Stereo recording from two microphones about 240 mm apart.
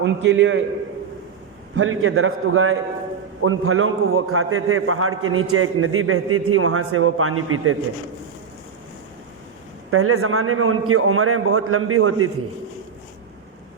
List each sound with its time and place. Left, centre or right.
0.0 s a man's voice: right
1.7 s a man's voice: right
9.9 s a man's voice: right